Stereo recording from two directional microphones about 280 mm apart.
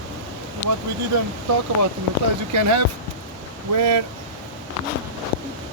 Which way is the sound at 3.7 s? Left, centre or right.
Right.